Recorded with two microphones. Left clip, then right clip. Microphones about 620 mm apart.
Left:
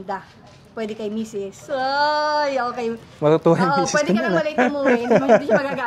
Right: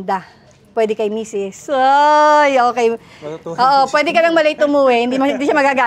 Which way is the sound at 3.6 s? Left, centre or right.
Right.